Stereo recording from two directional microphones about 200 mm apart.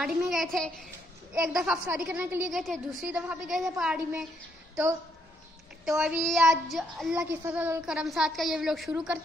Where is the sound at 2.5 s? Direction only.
Centre (ahead or behind).